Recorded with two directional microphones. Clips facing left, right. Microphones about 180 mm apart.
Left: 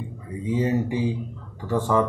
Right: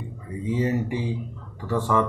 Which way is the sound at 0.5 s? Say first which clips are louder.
Left 1 dB; 15° left (ahead or behind).